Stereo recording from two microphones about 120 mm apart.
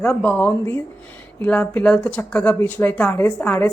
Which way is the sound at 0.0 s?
10° left (ahead or behind).